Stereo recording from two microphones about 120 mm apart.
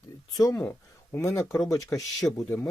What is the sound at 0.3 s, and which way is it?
Speech, 30° left (ahead or behind).